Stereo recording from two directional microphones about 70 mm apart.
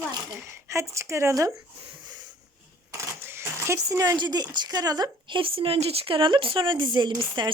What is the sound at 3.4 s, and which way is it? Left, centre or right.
Speech, right.